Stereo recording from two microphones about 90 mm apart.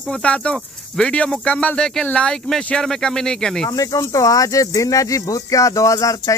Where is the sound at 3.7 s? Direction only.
40° left (ahead or behind).